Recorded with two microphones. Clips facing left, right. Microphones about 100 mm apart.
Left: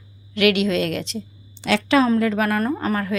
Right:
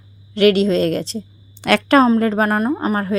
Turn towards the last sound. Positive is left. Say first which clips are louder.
# right 3 dB
turn(degrees=-30)  # may be behind; listen again after turning